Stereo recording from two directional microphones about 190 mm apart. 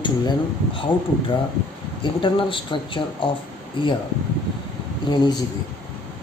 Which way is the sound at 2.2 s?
25° left (ahead or behind).